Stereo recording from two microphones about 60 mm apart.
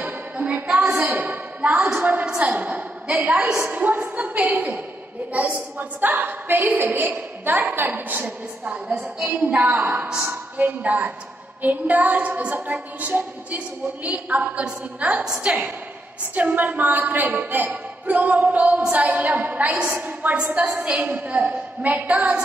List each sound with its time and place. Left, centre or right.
0.0 s music: right
1.1 s a woman's voice: right